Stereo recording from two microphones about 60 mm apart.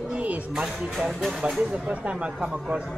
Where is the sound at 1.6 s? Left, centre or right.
Centre.